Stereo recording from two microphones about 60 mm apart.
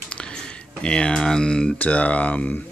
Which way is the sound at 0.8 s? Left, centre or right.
Centre.